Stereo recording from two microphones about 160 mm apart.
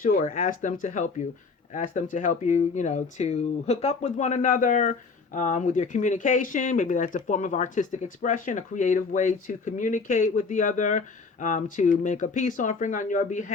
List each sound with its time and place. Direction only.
0.0 s speech: 60° left (ahead or behind)